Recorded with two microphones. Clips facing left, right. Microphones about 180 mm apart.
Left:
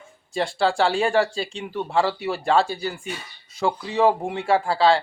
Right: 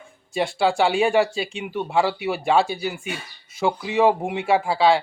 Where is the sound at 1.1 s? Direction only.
20° right (ahead or behind).